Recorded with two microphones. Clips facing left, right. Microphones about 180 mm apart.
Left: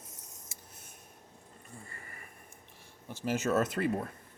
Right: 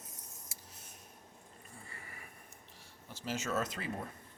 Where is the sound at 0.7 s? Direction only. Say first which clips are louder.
Left 1 dB; 50° left (ahead or behind).